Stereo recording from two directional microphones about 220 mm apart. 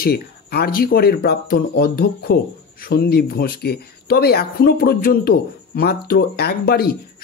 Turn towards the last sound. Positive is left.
turn(degrees=45)  # may be behind; listen again after turning